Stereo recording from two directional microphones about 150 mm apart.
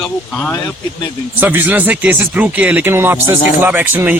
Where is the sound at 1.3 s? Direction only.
10° right (ahead or behind).